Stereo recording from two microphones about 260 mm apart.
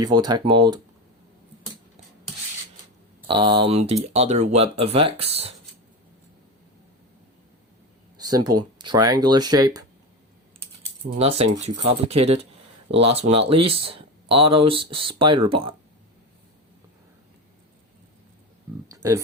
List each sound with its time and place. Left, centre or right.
0.0 s speech: centre
3.2 s speech: centre
8.3 s speech: centre
11.2 s speech: right
18.9 s a sound: centre